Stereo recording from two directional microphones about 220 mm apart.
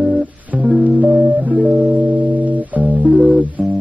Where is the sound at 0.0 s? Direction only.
5° right (ahead or behind).